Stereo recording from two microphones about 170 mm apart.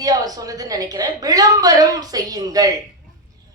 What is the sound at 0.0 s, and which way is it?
A woman's voice, 20° right (ahead or behind).